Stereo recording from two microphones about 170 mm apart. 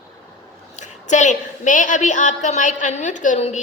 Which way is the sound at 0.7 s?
45° left (ahead or behind).